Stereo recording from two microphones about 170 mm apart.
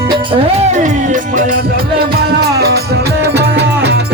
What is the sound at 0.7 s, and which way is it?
Music, 45° right (ahead or behind).